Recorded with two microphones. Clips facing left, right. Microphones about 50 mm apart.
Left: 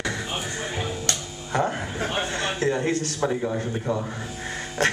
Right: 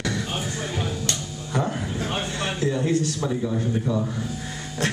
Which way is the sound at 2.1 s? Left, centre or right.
Left.